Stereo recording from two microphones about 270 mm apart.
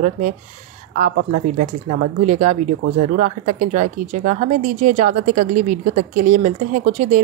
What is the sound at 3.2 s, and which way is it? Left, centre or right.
Speech, right.